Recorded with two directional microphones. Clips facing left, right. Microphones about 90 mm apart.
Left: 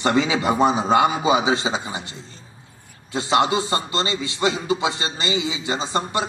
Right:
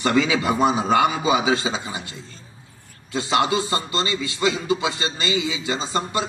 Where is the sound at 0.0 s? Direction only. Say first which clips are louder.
Even; 25° left (ahead or behind).